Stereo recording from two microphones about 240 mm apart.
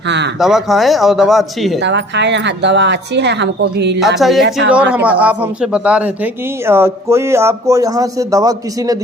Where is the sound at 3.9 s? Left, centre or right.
Centre.